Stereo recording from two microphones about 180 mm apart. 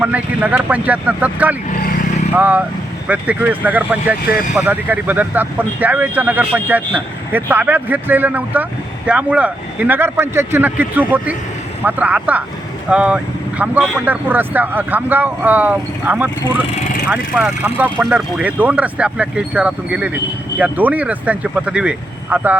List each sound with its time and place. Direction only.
0.0 s speech: 10° right (ahead or behind)
4.3 s speech: 50° left (ahead or behind)
4.5 s speech: 10° right (ahead or behind)